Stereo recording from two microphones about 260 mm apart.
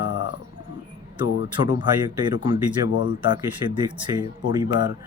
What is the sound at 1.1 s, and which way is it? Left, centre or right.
Speech, centre.